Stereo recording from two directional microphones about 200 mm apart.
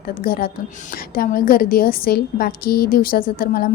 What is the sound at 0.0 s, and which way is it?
A woman's voice, 50° left (ahead or behind).